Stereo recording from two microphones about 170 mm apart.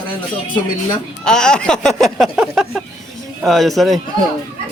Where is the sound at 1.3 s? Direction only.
5° left (ahead or behind).